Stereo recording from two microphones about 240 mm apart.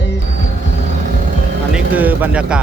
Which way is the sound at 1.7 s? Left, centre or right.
Centre.